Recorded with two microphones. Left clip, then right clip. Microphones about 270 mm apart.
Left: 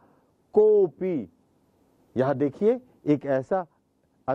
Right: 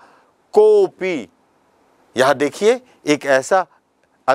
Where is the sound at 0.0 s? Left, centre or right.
Centre.